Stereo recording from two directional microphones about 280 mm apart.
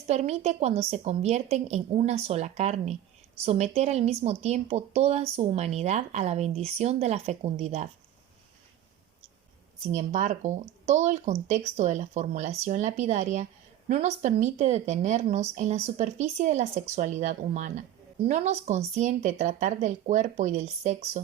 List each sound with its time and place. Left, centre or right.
0.1 s speech: right
9.8 s speech: right